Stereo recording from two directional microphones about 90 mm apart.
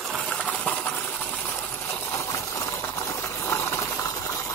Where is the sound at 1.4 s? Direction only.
25° left (ahead or behind).